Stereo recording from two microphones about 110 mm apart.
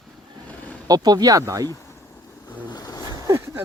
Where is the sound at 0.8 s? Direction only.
35° right (ahead or behind).